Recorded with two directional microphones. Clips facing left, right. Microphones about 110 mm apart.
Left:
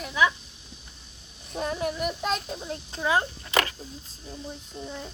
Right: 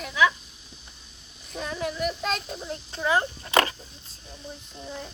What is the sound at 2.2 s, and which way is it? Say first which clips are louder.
Speech: left 1 dB; 5° left (ahead or behind).